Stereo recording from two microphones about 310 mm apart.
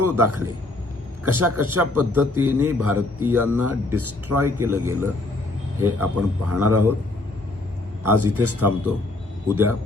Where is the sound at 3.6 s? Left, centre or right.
Right.